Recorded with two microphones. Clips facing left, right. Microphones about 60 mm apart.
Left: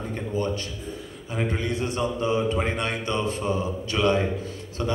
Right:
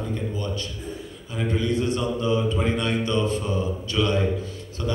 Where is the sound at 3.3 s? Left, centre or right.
Left.